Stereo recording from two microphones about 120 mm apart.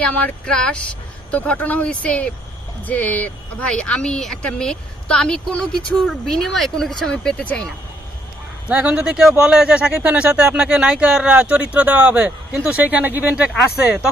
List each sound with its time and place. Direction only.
0.0 s speech: 10° left (ahead or behind)
8.7 s speech: 10° right (ahead or behind)